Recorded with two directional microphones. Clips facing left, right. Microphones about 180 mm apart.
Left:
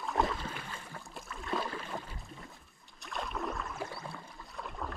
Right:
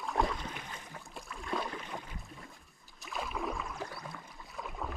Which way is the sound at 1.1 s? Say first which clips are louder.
Left 1 dB; centre (ahead or behind).